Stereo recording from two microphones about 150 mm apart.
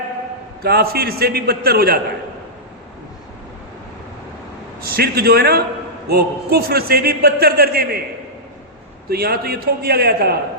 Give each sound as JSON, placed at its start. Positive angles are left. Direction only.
{"t": 0.6, "sound": "a man's voice", "side_deg": -90}
{"t": 4.8, "sound": "a man's voice", "side_deg": -90}
{"t": 9.0, "sound": "a man's voice", "side_deg": -90}